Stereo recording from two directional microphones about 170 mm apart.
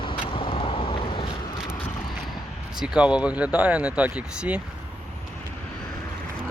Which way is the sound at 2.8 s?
5° right (ahead or behind).